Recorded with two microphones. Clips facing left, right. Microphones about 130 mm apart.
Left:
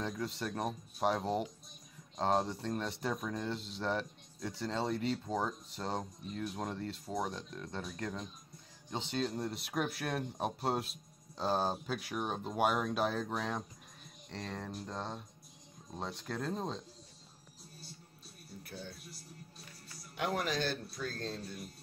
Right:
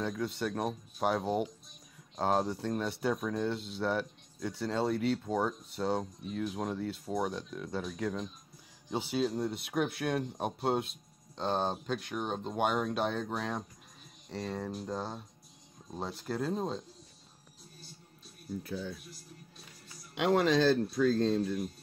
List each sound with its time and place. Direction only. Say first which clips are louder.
0.0 s speech: right 4 dB; centre (ahead or behind)
20.2 s speech: right 8 dB; 90° right